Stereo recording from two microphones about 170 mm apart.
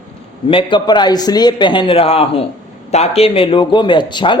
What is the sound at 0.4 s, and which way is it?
A man's voice, 30° left (ahead or behind).